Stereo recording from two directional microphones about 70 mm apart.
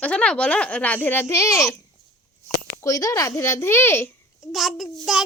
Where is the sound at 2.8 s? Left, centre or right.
Left.